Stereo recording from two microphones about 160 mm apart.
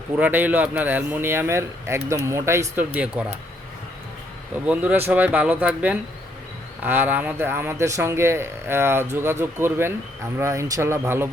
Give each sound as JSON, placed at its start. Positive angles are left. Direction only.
{"t": 0.2, "sound": "speech", "side_deg": -10}
{"t": 4.6, "sound": "speech", "side_deg": -10}